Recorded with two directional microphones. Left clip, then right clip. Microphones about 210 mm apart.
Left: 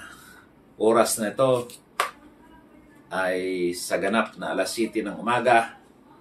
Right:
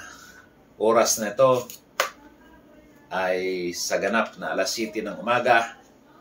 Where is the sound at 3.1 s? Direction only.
15° left (ahead or behind).